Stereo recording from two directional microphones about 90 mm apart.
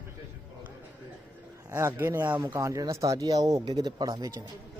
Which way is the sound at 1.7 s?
30° right (ahead or behind).